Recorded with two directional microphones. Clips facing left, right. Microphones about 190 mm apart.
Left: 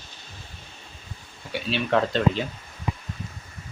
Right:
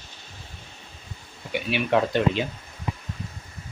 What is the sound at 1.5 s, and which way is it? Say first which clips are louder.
Speech: right 1 dB; 10° right (ahead or behind).